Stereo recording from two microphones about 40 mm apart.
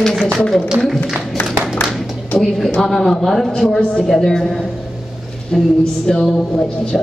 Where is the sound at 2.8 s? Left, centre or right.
Centre.